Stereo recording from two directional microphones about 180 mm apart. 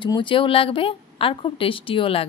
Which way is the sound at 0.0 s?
25° left (ahead or behind).